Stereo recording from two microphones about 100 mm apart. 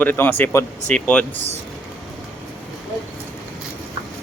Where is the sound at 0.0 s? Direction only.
20° left (ahead or behind).